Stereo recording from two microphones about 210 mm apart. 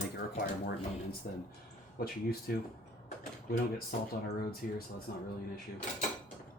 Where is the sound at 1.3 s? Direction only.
40° left (ahead or behind).